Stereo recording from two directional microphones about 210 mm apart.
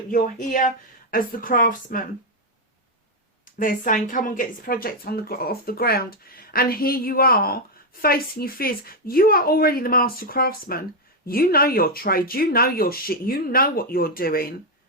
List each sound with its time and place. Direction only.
0.1 s speech: 40° left (ahead or behind)
3.4 s speech: 40° left (ahead or behind)